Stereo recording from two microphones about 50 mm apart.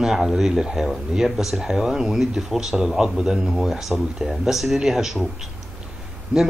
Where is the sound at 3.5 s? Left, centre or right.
Centre.